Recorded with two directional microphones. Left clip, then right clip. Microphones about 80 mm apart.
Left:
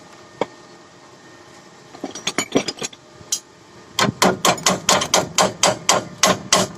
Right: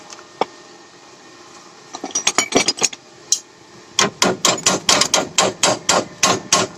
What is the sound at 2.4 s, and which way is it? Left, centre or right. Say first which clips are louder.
Mechanisms: right 4 dB; left.